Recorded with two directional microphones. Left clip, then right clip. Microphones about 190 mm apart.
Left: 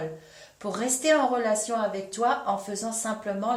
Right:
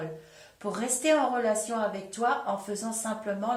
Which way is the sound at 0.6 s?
40° left (ahead or behind).